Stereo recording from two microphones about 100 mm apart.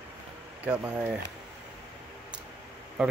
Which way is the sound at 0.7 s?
15° right (ahead or behind).